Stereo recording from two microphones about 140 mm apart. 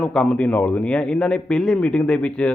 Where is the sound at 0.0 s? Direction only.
5° left (ahead or behind).